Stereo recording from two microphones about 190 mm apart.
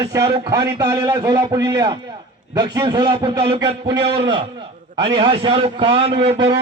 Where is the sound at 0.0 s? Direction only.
15° right (ahead or behind).